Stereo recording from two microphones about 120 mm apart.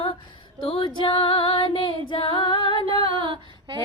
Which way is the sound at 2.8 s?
45° right (ahead or behind).